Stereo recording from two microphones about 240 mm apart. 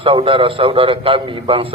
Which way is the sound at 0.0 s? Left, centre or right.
Right.